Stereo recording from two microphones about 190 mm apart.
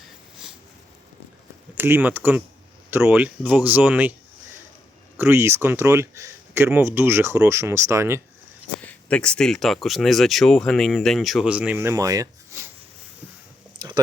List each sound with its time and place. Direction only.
1.7 s speech: 10° right (ahead or behind)
5.1 s speech: 10° right (ahead or behind)
8.8 s speech: 5° left (ahead or behind); by 12.6 s 15° right (ahead or behind)
13.7 s a sound: 20° right (ahead or behind)